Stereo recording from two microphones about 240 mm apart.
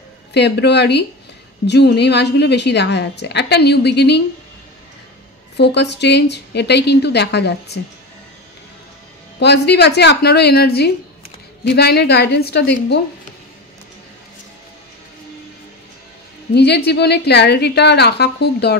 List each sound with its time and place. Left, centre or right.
0.3 s a woman's voice: left
5.6 s a woman's voice: left
9.4 s a woman's voice: left
16.5 s a woman's voice: left